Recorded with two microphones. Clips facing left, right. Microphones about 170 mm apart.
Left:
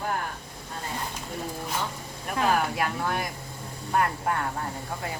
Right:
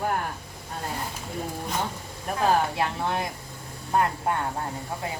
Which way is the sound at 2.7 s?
25° right (ahead or behind).